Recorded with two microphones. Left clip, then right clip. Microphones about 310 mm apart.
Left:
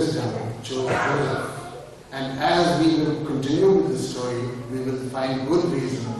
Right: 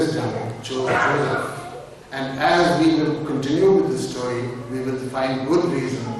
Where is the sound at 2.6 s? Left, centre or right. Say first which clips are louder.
Right 1 dB; centre.